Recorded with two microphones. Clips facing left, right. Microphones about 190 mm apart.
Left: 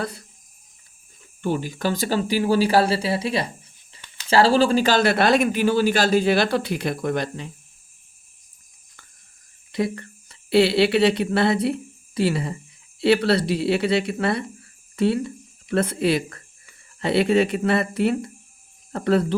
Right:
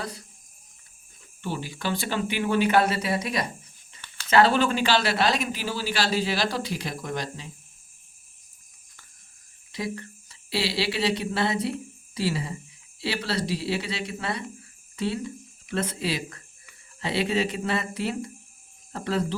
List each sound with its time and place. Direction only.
1.4 s speech: 45° left (ahead or behind)
9.7 s speech: 60° left (ahead or behind)